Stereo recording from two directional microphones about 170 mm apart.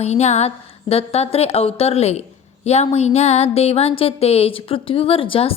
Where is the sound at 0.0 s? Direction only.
40° left (ahead or behind).